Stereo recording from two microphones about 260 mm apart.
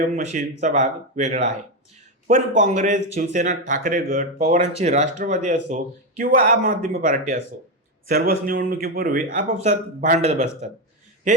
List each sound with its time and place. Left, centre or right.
0.0 s speech: right
2.6 s a man's voice: right